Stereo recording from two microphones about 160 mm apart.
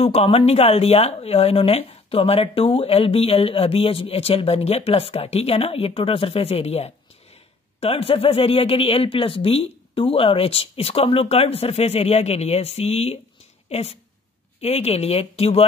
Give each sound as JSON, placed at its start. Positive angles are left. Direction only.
{"t": 0.0, "sound": "speech", "side_deg": 40}